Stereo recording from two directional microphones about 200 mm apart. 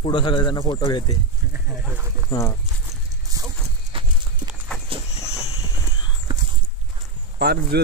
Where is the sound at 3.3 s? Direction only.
20° right (ahead or behind).